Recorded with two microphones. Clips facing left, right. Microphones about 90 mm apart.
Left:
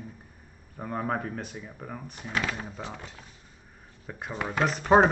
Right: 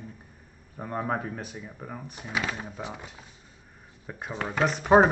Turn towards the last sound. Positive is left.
turn(degrees=-5)  # may be behind; listen again after turning